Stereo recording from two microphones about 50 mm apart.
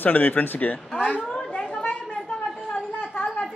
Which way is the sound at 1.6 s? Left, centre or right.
Centre.